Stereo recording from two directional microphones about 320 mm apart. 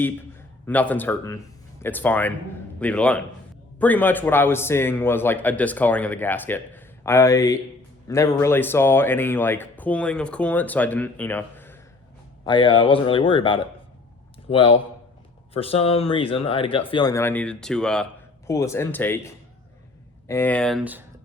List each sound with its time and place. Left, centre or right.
0.0 s a man's voice: centre